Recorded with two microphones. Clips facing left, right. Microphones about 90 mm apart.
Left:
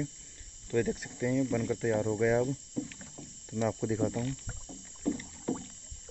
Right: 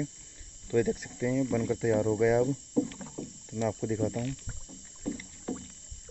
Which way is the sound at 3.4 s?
5° left (ahead or behind).